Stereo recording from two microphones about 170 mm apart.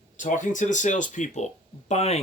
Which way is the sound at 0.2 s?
50° left (ahead or behind).